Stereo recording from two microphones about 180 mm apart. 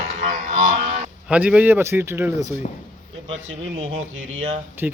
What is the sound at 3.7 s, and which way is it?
Speech, 30° right (ahead or behind).